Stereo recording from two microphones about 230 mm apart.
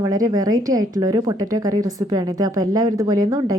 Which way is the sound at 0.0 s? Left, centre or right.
Centre.